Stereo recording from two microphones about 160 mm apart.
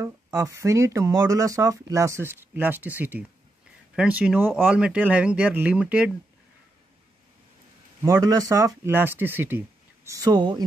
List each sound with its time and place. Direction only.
0.0 s speech: 15° right (ahead or behind)
8.0 s speech: 20° right (ahead or behind)
10.0 s speech: 20° right (ahead or behind)